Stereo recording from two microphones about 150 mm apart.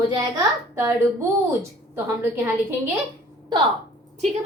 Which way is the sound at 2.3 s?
15° right (ahead or behind).